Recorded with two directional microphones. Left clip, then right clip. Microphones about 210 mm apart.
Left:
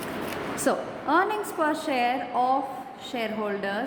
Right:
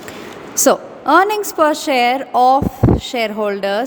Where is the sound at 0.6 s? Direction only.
50° right (ahead or behind).